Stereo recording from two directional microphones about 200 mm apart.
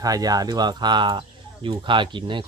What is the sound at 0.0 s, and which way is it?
Speech, 20° right (ahead or behind).